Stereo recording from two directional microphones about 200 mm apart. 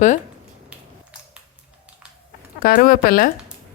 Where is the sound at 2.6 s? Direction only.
45° left (ahead or behind).